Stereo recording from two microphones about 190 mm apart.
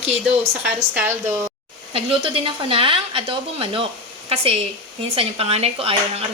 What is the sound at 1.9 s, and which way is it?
Speech, 30° right (ahead or behind).